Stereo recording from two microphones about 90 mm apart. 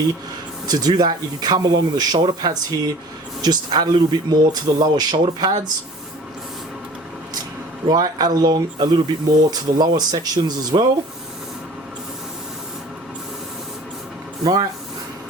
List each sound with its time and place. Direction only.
0.7 s speech: 45° right (ahead or behind)
7.9 s speech: 45° right (ahead or behind)
14.4 s speech: 45° right (ahead or behind)